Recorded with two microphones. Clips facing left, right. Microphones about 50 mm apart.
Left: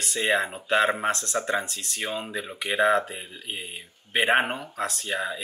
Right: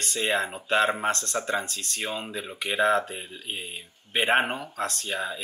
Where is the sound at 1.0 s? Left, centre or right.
Centre.